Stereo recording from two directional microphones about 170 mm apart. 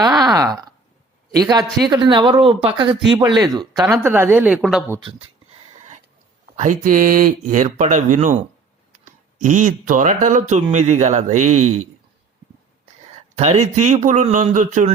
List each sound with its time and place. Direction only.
0.0 s a sound: 20° right (ahead or behind)
1.3 s speech: 20° right (ahead or behind)
3.8 s speech: 10° right (ahead or behind)
6.6 s speech: 50° right (ahead or behind)
13.3 s speech: 40° right (ahead or behind)